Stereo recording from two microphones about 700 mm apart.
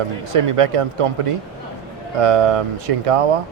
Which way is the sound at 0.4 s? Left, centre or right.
Right.